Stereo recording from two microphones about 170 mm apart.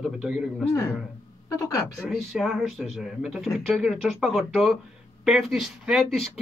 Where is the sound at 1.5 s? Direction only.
20° left (ahead or behind).